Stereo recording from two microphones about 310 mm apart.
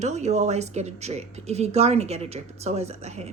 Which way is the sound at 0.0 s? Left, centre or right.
Right.